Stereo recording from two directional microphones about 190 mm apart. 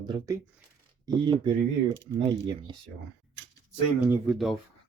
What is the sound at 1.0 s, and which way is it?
Speech, 25° right (ahead or behind).